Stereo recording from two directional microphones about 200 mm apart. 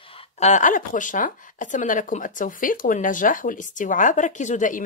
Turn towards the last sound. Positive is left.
turn(degrees=40)  # may be behind; listen again after turning